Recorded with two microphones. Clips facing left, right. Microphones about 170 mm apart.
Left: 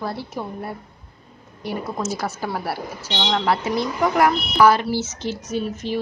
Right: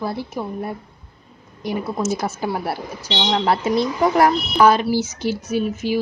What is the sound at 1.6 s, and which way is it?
Speech, 15° right (ahead or behind).